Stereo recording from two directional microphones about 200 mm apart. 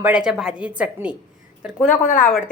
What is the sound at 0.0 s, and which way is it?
A woman's voice, 5° right (ahead or behind).